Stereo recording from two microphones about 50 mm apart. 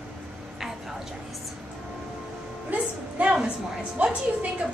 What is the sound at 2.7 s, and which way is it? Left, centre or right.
A woman's voice, right.